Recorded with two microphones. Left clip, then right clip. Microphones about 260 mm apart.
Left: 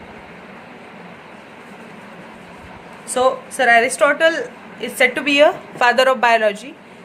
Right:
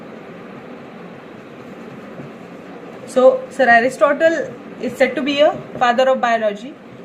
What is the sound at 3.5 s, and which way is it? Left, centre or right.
A woman's voice, left.